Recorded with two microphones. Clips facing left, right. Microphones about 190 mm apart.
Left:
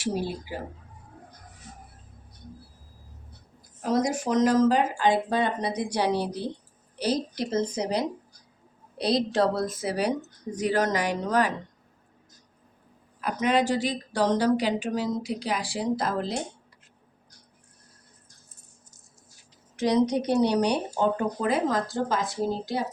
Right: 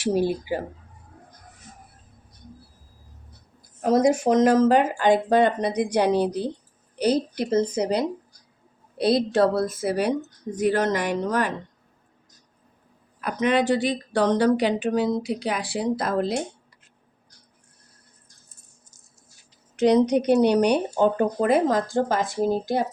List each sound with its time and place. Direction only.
0.0 s speech: 60° right (ahead or behind)
3.8 s a woman's voice: 55° right (ahead or behind)
13.2 s speech: 60° right (ahead or behind)
19.8 s speech: 65° right (ahead or behind)